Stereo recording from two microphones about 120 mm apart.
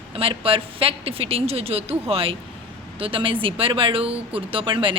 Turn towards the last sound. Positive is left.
turn(degrees=-45)  # may be behind; listen again after turning